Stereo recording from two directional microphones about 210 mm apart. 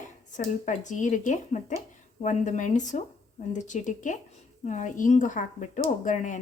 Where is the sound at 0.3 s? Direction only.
35° left (ahead or behind).